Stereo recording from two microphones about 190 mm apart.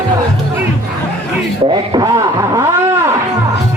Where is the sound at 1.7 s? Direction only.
25° right (ahead or behind).